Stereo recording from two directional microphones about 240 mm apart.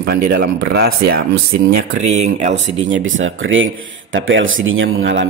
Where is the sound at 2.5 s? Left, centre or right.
Right.